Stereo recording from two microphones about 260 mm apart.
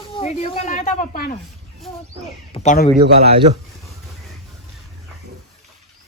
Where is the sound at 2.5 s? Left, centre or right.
Left.